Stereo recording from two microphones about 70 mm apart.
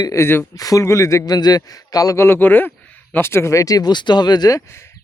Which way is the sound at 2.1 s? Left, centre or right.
Left.